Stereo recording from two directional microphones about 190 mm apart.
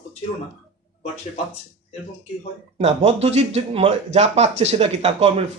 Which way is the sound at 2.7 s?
35° right (ahead or behind).